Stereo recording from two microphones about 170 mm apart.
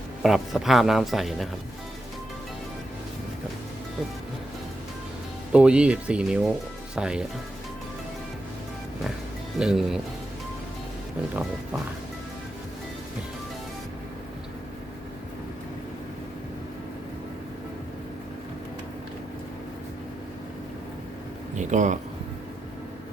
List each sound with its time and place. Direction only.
0.2 s speech: centre (ahead or behind)
5.5 s speech: 5° right (ahead or behind)
9.6 s speech: centre (ahead or behind)
21.7 s speech: 45° right (ahead or behind)